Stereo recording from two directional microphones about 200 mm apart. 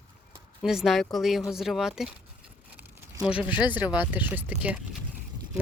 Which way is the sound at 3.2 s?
5° right (ahead or behind).